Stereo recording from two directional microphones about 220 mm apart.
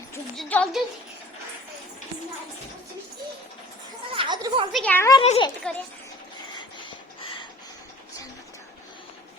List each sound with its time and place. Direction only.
0.3 s a woman's voice: 5° left (ahead or behind)
4.1 s a sound: 20° right (ahead or behind)
4.7 s speech: 5° left (ahead or behind)
5.2 s a child's voice: 30° left (ahead or behind)